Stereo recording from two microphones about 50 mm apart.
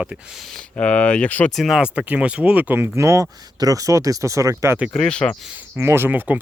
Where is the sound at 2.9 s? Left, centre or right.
Right.